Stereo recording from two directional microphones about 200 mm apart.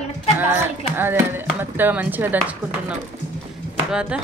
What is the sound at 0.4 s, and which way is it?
Speech, 10° right (ahead or behind).